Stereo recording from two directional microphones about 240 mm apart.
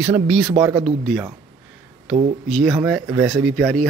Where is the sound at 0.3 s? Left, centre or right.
Centre.